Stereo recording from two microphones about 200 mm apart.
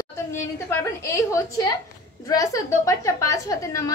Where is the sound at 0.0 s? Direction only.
10° left (ahead or behind).